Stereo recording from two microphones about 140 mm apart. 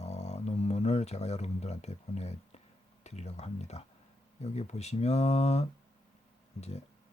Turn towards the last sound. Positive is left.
turn(degrees=50)  # may be behind; listen again after turning